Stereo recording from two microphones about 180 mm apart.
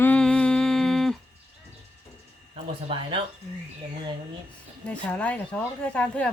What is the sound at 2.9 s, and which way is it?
Speech, 30° right (ahead or behind).